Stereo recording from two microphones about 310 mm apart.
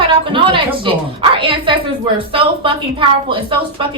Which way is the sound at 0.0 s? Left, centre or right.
Centre.